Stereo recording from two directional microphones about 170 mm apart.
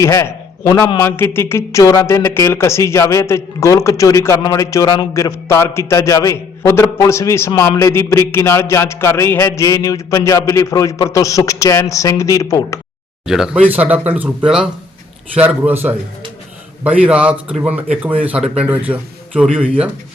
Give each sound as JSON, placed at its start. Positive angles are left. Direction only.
{"t": 0.0, "sound": "a man's voice", "side_deg": 15}
{"t": 13.2, "sound": "speech", "side_deg": -5}